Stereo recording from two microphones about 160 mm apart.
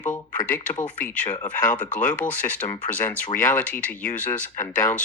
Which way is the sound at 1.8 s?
55° left (ahead or behind).